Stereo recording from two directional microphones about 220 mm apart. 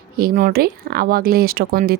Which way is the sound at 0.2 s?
40° right (ahead or behind).